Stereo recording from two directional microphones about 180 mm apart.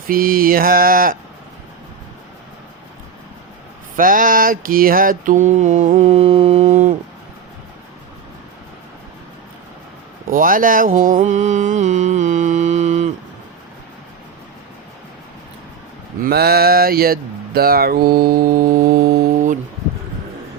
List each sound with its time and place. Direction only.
0.1 s mantra: 55° right (ahead or behind)
3.9 s mantra: 50° right (ahead or behind)
10.3 s mantra: 50° right (ahead or behind)
16.2 s a sound: 60° right (ahead or behind)